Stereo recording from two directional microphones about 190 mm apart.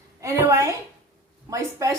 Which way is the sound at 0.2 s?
15° right (ahead or behind).